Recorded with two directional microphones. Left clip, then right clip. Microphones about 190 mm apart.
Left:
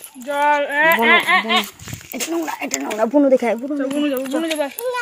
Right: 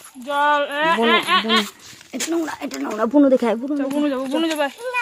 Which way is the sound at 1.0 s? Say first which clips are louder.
Left 3 dB; 25° right (ahead or behind).